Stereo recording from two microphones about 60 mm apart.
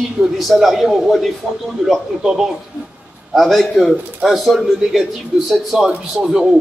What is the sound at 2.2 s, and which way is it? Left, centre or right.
Speech, centre.